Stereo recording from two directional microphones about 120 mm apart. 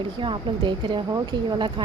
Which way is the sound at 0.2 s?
40° right (ahead or behind).